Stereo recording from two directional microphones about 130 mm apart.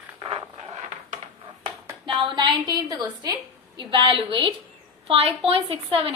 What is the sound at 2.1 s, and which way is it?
A woman's voice, 40° right (ahead or behind).